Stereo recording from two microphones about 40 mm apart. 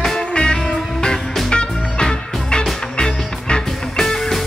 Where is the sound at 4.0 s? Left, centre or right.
Centre.